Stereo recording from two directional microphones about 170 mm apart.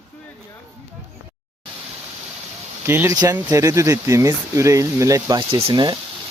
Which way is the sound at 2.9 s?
15° right (ahead or behind).